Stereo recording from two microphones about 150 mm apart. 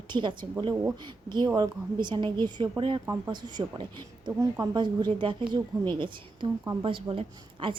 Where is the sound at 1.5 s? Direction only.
30° right (ahead or behind).